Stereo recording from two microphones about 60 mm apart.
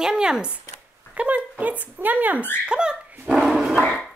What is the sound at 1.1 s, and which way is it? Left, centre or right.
Speech, right.